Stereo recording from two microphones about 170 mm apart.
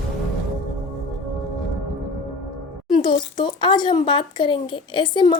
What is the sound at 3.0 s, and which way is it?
Speech, 25° left (ahead or behind).